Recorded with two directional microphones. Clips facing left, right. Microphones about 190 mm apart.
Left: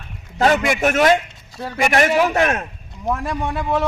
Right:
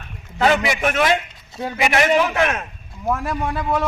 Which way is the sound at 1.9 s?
40° left (ahead or behind).